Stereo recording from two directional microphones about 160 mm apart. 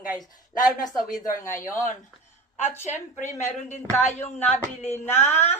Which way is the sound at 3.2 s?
50° left (ahead or behind).